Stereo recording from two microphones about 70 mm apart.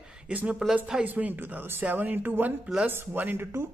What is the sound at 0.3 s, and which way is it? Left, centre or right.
Speech, centre.